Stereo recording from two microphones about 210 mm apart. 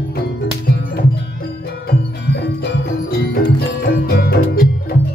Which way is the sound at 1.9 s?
50° left (ahead or behind).